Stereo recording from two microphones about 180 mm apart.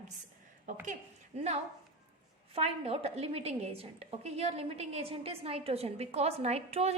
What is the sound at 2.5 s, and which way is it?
A woman's voice, 35° right (ahead or behind).